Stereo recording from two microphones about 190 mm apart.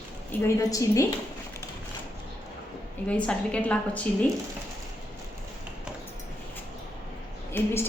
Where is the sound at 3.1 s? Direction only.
5° left (ahead or behind).